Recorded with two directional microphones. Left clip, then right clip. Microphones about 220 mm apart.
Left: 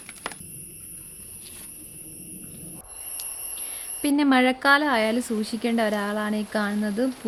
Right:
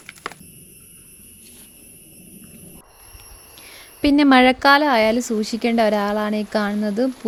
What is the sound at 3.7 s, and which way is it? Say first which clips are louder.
Speech: right 7 dB; 30° right (ahead or behind).